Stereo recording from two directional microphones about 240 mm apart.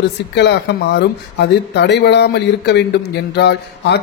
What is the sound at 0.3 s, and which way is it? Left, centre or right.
Speech, left.